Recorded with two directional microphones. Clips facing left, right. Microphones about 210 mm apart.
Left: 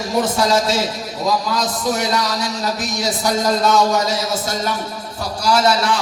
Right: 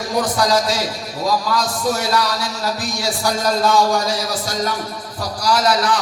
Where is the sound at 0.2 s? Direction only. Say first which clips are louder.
Left 1 dB; 25° left (ahead or behind).